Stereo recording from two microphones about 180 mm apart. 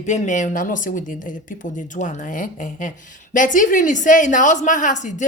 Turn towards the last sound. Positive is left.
turn(degrees=40)  # may be behind; listen again after turning